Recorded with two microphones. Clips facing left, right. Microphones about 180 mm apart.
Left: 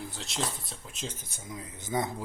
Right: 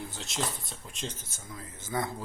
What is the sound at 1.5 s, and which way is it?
Speech, 20° left (ahead or behind).